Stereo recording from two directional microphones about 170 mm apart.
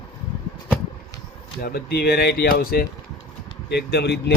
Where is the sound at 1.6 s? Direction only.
65° left (ahead or behind).